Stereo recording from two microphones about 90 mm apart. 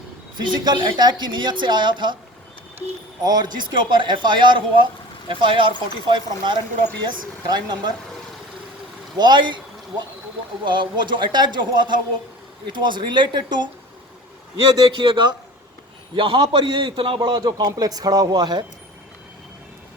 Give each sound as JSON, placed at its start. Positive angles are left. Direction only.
{"t": 0.3, "sound": "a woman's voice", "side_deg": -55}
{"t": 3.2, "sound": "a woman's voice", "side_deg": -50}
{"t": 9.1, "sound": "a woman's voice", "side_deg": -55}
{"t": 10.7, "sound": "a woman's voice", "side_deg": -60}
{"t": 14.8, "sound": "a man's voice", "side_deg": -65}
{"t": 17.2, "sound": "speech", "side_deg": -50}